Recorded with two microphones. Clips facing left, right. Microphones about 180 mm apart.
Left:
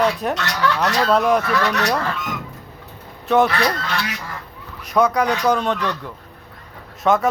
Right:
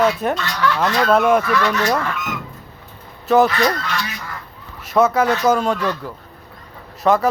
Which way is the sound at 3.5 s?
65° left (ahead or behind).